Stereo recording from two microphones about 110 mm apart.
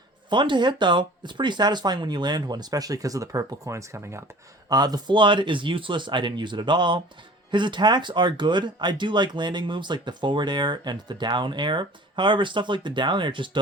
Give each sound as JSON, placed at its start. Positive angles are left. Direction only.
{"t": 0.3, "sound": "speech", "side_deg": -45}
{"t": 4.7, "sound": "speech", "side_deg": -35}